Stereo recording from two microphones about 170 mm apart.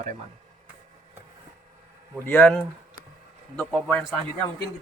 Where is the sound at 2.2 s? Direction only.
10° left (ahead or behind).